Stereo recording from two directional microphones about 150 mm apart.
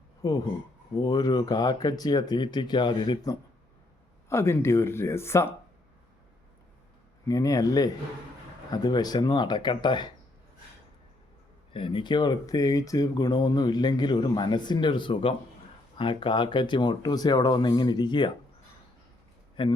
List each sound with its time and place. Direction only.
0.2 s speech: 25° left (ahead or behind)
7.3 s speech: 25° left (ahead or behind)
11.7 s speech: 35° left (ahead or behind)
19.6 s speech: 35° left (ahead or behind)